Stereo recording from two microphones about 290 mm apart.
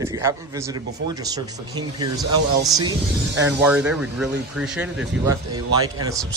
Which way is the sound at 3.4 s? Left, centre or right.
Centre.